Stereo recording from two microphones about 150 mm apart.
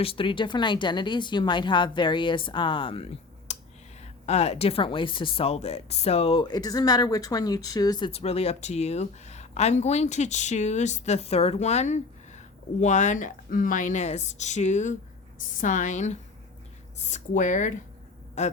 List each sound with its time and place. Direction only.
0.0 s speech: 35° left (ahead or behind)
8.1 s speech: 45° left (ahead or behind)